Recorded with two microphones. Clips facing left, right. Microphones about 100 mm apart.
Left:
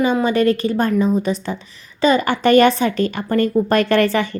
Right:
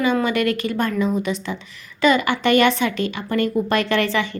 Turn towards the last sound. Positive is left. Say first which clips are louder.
# left 4 dB
turn(degrees=45)  # may be behind; listen again after turning